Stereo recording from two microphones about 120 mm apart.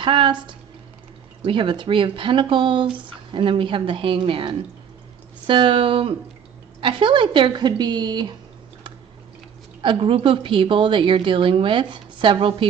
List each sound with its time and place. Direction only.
0.0 s speech: 40° right (ahead or behind)
9.8 s speech: 50° right (ahead or behind)